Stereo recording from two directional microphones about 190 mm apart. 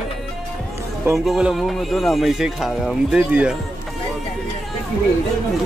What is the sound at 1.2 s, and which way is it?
Speech, centre (ahead or behind).